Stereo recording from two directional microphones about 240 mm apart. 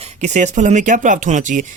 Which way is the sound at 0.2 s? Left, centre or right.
Right.